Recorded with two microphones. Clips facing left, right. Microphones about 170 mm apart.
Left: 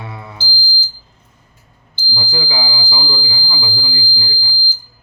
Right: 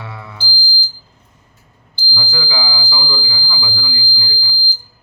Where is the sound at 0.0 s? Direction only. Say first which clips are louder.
Left 1 dB; 25° left (ahead or behind).